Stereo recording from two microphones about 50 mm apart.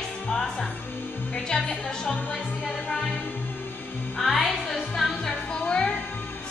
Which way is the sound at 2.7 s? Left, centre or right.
Centre.